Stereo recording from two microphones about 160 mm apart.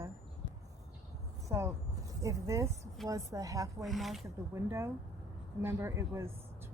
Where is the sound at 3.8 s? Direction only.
Centre (ahead or behind).